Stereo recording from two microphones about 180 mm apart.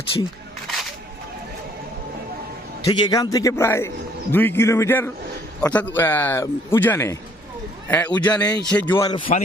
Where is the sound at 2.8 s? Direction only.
20° left (ahead or behind).